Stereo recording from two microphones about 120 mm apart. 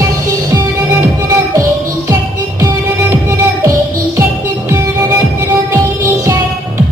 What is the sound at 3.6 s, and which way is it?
Music, 25° right (ahead or behind).